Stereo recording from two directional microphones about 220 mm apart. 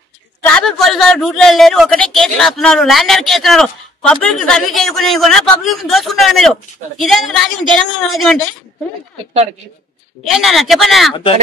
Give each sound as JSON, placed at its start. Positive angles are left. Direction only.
{"t": 0.5, "sound": "a man's voice", "side_deg": 0}
{"t": 10.2, "sound": "a man's voice", "side_deg": 0}